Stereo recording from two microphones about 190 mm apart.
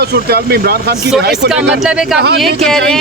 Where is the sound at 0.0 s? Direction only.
55° right (ahead or behind).